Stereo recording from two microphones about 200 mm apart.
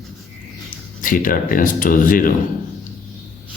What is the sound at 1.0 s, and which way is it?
Speech, 45° left (ahead or behind).